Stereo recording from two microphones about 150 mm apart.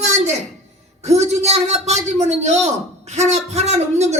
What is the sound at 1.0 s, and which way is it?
Speech, 45° right (ahead or behind).